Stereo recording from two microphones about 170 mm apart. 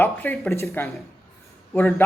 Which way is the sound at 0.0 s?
10° left (ahead or behind).